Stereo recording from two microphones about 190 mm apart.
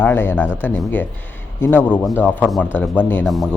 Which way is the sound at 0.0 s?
10° left (ahead or behind).